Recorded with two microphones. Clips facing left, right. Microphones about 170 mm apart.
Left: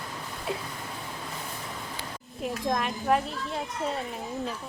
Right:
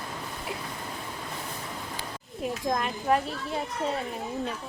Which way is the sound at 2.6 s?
Centre (ahead or behind).